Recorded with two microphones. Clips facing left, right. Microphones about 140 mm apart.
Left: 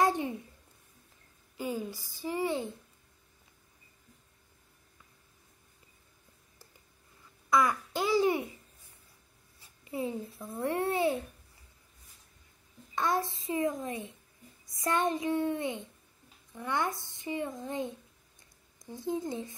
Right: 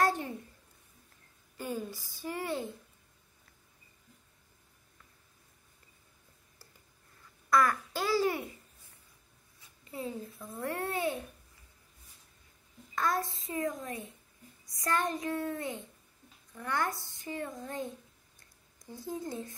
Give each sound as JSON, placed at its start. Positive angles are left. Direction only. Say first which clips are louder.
{"t": 0.0, "sound": "a sound", "louder": "left 2 dB", "side_deg": 20}
{"t": 1.6, "sound": "a woman's voice", "louder": "left 2 dB", "side_deg": 10}
{"t": 7.4, "sound": "babbling", "louder": "even", "side_deg": 15}
{"t": 9.8, "sound": "a child's voice", "louder": "left 4 dB", "side_deg": 20}
{"t": 12.9, "sound": "a child's voice", "louder": "left 2 dB", "side_deg": 25}